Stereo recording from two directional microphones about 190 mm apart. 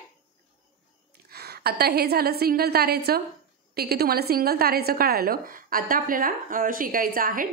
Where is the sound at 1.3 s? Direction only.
55° right (ahead or behind).